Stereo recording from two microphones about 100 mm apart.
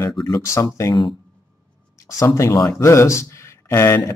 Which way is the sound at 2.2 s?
30° left (ahead or behind).